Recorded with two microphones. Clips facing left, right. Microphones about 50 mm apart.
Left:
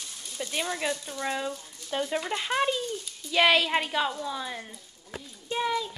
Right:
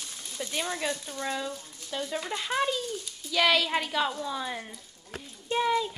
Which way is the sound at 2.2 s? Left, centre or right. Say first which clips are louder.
Left 2 dB; centre.